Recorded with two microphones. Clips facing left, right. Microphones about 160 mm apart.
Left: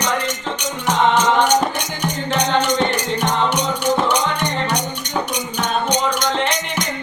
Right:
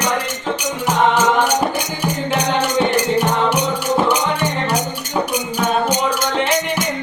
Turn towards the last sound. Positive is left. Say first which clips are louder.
# right 3 dB
turn(degrees=-5)  # may be behind; listen again after turning